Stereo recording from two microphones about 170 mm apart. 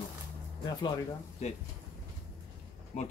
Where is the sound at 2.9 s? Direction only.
45° left (ahead or behind).